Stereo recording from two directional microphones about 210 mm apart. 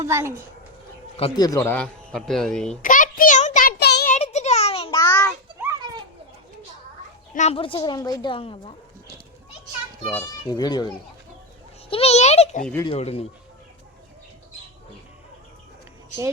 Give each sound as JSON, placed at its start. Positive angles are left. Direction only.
{"t": 0.0, "sound": "a child's voice", "side_deg": -10}
{"t": 1.1, "sound": "a man's voice", "side_deg": 20}
{"t": 2.8, "sound": "child singing", "side_deg": 40}
{"t": 4.1, "sound": "a sound", "side_deg": 30}
{"t": 4.9, "sound": "a sound", "side_deg": 10}
{"t": 7.3, "sound": "a woman's voice", "side_deg": 30}
{"t": 10.1, "sound": "a woman's voice", "side_deg": 15}
{"t": 11.9, "sound": "a child's voice", "side_deg": 30}